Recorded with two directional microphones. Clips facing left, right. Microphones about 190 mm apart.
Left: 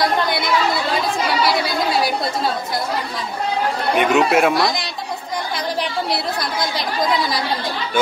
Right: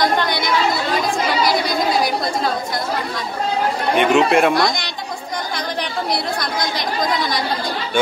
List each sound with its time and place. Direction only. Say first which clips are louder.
0.0 s a woman's voice: even; 5° left (ahead or behind)
1.4 s chatter: right 1 dB; 5° left (ahead or behind)
3.9 s speech: right 1 dB; 5° left (ahead or behind)